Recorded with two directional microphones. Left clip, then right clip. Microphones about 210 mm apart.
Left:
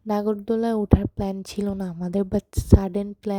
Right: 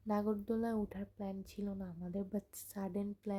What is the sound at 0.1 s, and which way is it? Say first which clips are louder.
Speech: left 14 dB; 35° left (ahead or behind).